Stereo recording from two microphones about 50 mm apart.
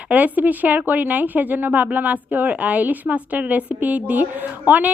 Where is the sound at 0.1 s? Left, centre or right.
Right.